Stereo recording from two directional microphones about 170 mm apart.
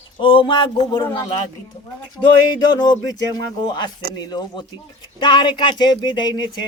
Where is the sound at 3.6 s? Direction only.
25° left (ahead or behind).